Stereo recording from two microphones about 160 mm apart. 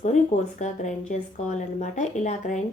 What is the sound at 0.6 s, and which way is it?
Speech, 50° left (ahead or behind).